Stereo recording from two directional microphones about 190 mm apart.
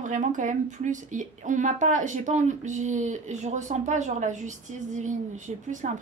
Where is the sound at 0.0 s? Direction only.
40° right (ahead or behind).